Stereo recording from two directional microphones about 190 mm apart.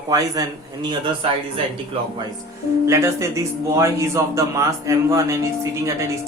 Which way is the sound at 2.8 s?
15° right (ahead or behind).